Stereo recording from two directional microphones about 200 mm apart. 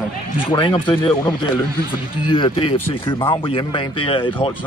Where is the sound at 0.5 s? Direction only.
25° left (ahead or behind).